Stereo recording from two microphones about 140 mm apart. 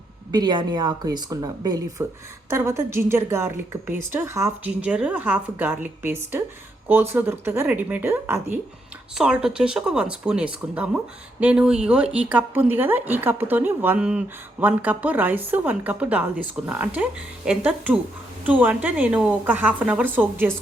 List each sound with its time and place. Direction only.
0.3 s speech: 30° right (ahead or behind); by 20.5 s 15° right (ahead or behind)